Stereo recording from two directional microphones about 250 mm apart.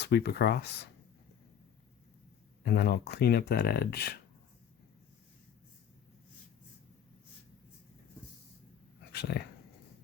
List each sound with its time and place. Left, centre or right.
0.0 s speech: left
2.6 s speech: left
9.1 s dog: left